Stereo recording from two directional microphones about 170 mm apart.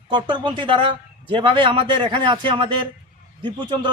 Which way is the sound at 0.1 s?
25° right (ahead or behind).